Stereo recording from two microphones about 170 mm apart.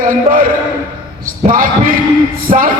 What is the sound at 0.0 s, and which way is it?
Speech, 55° right (ahead or behind).